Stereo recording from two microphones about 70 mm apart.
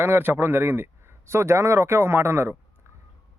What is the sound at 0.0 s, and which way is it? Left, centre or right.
Speech, right.